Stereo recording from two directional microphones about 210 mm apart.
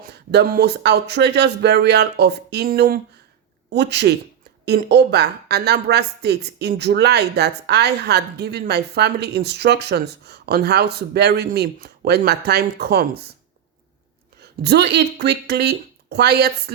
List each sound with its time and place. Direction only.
0.0 s a woman's voice: 50° right (ahead or behind)
14.4 s a woman's voice: 50° right (ahead or behind)